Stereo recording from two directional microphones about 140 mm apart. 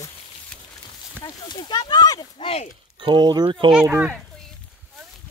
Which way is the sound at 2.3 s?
45° left (ahead or behind).